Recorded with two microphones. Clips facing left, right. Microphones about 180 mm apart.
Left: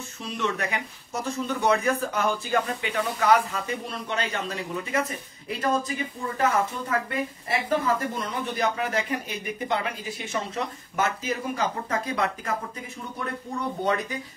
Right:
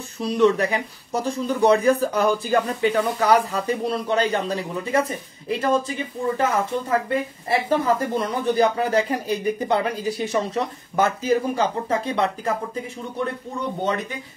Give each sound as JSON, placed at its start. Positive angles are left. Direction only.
{"t": 0.2, "sound": "speech", "side_deg": -35}